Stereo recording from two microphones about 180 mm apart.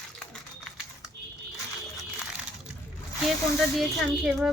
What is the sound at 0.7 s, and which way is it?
Typing, centre (ahead or behind).